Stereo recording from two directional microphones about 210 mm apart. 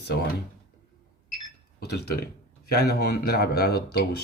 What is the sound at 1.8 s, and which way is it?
A man's voice, 50° left (ahead or behind).